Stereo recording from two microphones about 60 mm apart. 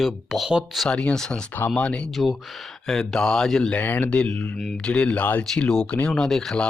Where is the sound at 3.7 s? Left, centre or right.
Left.